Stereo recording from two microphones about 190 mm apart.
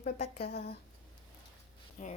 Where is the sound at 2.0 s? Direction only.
45° left (ahead or behind).